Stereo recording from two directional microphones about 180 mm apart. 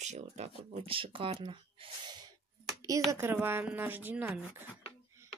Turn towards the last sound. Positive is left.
turn(degrees=-10)  # may be behind; listen again after turning